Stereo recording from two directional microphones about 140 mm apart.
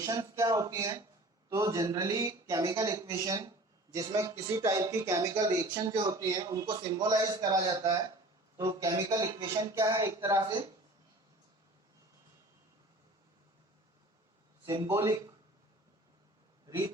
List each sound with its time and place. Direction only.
0.0 s a man's voice: 25° right (ahead or behind)
14.6 s a sound: 30° right (ahead or behind)
14.8 s speech: 20° right (ahead or behind)